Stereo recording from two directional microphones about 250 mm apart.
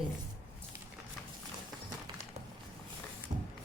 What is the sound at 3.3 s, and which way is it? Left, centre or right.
Printer, right.